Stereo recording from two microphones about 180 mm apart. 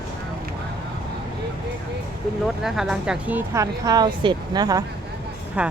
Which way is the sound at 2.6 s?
5° right (ahead or behind).